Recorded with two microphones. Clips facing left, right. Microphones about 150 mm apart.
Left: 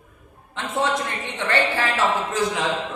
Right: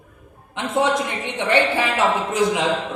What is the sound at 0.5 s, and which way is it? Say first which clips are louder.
A woman's voice: right 4 dB; 15° right (ahead or behind).